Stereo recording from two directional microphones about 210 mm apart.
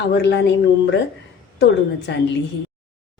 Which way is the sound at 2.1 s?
55° left (ahead or behind).